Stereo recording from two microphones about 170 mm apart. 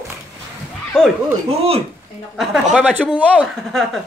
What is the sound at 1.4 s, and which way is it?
Speech, 35° right (ahead or behind).